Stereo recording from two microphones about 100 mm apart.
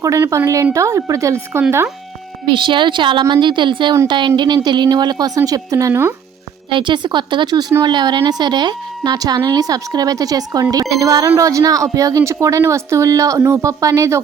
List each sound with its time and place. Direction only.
0.0 s speech: 30° right (ahead or behind)
2.5 s speech: 55° right (ahead or behind); by 5.9 s 35° right (ahead or behind)
5.9 s speech: 20° right (ahead or behind)
6.7 s speech: 55° right (ahead or behind); by 14.2 s 30° right (ahead or behind)